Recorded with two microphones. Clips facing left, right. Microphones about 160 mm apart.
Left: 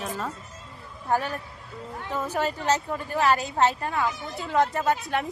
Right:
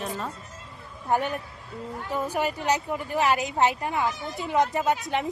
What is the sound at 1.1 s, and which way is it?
A man's voice, 20° right (ahead or behind).